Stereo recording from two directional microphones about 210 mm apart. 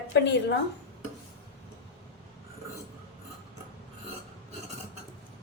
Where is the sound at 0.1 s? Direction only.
55° left (ahead or behind).